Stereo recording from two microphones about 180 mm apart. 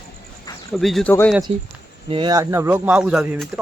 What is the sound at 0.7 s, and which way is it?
Speech, centre (ahead or behind).